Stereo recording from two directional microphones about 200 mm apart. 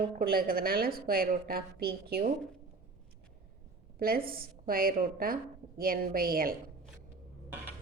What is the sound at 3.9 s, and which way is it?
A woman's voice, 50° right (ahead or behind).